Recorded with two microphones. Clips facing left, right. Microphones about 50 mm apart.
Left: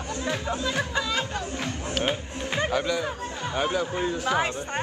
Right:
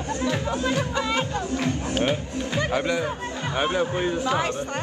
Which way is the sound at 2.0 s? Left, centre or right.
Left.